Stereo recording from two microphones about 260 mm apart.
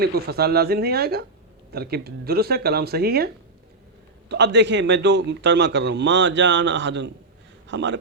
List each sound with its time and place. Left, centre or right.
0.0 s a man's voice: right